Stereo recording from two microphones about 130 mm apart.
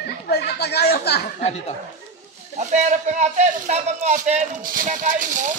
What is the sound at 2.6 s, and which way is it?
A man's voice, 70° right (ahead or behind).